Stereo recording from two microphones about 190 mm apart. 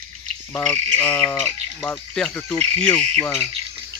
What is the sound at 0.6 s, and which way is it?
Bird, 10° left (ahead or behind).